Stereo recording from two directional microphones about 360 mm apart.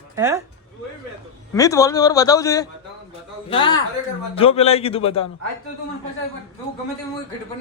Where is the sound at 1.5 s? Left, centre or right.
Centre.